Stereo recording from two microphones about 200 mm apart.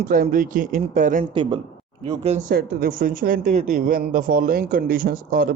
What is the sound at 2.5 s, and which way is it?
Speech, 45° right (ahead or behind).